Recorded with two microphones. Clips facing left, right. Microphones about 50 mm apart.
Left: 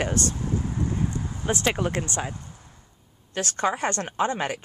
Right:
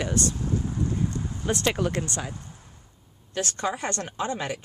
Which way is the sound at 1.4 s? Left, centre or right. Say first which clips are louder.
Left 1 dB; centre.